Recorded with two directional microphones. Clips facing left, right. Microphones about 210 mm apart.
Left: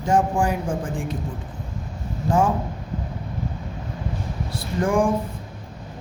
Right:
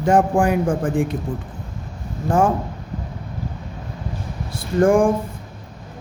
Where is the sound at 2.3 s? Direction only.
50° right (ahead or behind).